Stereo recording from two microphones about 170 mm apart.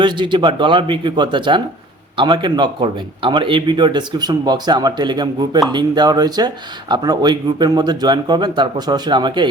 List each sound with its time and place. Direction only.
0.0 s speech: 30° right (ahead or behind)